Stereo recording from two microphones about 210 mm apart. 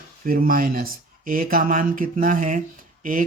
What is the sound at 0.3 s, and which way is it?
Speech, 40° right (ahead or behind).